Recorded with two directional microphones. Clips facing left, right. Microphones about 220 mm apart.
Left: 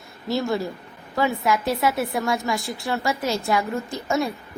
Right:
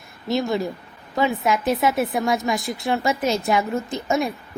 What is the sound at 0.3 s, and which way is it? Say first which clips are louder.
A woman's voice: right 2 dB; 20° right (ahead or behind).